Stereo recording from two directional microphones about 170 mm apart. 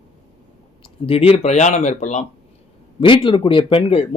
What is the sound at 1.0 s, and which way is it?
Speech, 35° left (ahead or behind).